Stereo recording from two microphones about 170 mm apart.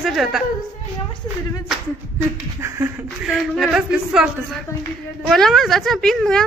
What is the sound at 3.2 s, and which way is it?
A woman's voice, centre (ahead or behind).